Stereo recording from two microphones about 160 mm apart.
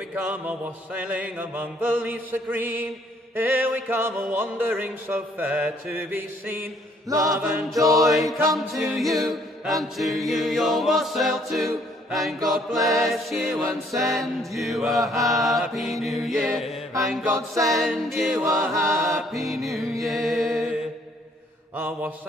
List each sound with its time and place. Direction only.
0.1 s mantra: 10° right (ahead or behind)
8.0 s a capella: centre (ahead or behind)
18.4 s mantra: 15° right (ahead or behind)
19.0 s a capella: centre (ahead or behind)
20.0 s music: centre (ahead or behind)
21.7 s mantra: 10° right (ahead or behind)